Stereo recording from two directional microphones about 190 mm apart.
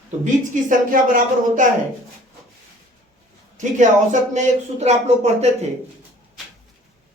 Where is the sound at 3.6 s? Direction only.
40° right (ahead or behind).